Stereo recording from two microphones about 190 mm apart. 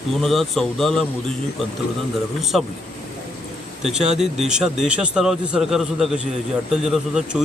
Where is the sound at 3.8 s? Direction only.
5° right (ahead or behind).